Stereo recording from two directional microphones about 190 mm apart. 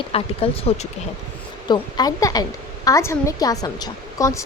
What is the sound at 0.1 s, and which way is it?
Speech, 30° left (ahead or behind).